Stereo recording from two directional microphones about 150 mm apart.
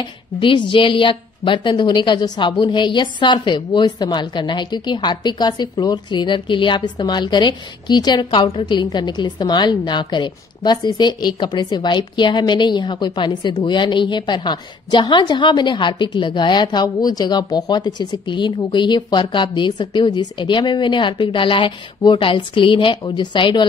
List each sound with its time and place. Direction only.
0.0 s a woman's voice: 35° left (ahead or behind)